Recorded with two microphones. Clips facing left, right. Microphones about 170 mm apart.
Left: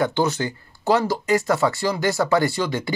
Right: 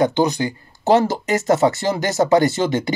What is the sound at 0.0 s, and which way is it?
Speech, 15° right (ahead or behind).